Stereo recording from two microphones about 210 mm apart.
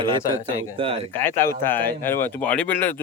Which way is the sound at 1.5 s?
10° left (ahead or behind).